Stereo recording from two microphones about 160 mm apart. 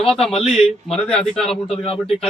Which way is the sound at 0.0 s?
5° left (ahead or behind).